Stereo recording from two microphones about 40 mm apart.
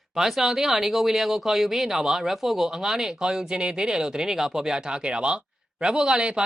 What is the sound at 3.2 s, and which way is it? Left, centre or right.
Speech, right.